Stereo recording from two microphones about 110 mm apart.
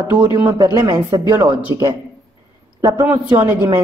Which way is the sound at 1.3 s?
20° right (ahead or behind).